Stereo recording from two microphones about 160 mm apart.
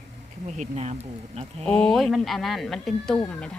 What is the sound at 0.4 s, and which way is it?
Speech, 45° right (ahead or behind).